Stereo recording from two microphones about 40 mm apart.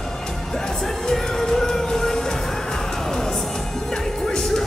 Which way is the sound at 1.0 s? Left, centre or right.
Centre.